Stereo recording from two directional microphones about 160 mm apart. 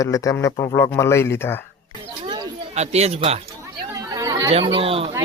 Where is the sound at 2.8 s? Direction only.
40° right (ahead or behind).